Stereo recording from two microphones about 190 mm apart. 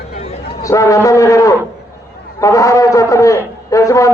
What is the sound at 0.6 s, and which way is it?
Speech, 15° left (ahead or behind).